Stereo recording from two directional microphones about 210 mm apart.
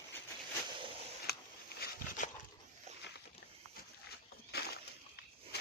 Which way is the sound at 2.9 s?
30° right (ahead or behind).